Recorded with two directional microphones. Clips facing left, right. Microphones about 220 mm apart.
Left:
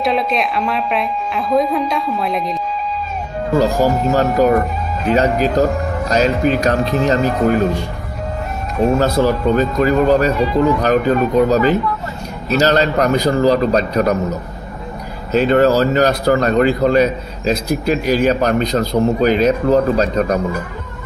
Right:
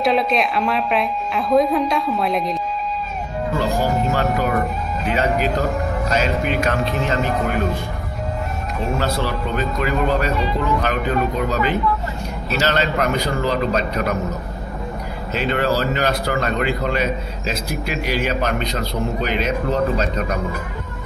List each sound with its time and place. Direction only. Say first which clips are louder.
0.0 s speech: even; centre (ahead or behind)
3.5 s speech: left 7 dB; 40° left (ahead or behind)
8.9 s speech: left 6 dB; 45° left (ahead or behind)
15.3 s speech: left 8 dB; 45° left (ahead or behind)